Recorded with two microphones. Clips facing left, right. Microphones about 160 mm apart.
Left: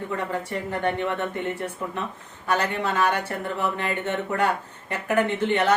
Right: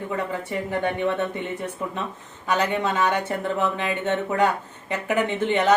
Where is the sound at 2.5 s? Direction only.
15° right (ahead or behind).